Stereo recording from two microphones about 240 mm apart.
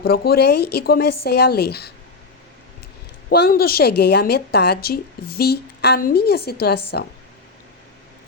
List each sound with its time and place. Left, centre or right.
0.0 s a woman's voice: left
3.2 s a woman's voice: left